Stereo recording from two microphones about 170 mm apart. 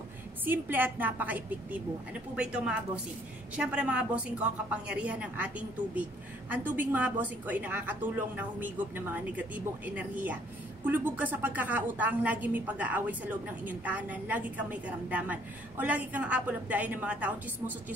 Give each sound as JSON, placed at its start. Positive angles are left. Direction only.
{"t": 0.5, "sound": "speech", "side_deg": -10}